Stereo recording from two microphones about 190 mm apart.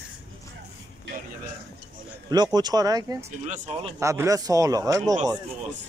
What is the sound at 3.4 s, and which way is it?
Speech, 35° right (ahead or behind).